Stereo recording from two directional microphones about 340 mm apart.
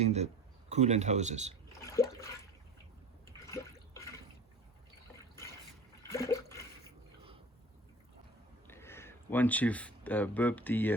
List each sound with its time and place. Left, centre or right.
0.0 s speech: centre
1.8 s water: centre
3.4 s water: centre
6.1 s toilet flush: centre
8.6 s speech: centre